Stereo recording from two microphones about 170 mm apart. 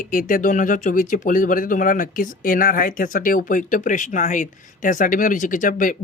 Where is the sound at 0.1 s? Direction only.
55° left (ahead or behind).